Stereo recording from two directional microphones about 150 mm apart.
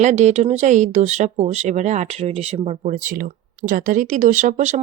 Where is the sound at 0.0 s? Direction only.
50° right (ahead or behind).